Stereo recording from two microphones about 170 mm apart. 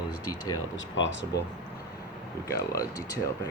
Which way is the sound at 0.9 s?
90° left.